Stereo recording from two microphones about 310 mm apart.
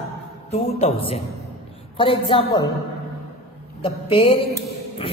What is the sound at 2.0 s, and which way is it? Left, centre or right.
Speech, centre.